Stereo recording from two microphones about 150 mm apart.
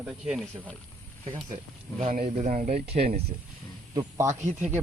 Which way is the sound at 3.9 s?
20° right (ahead or behind).